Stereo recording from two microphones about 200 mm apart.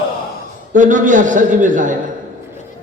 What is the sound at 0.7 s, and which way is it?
A man's voice, 40° right (ahead or behind).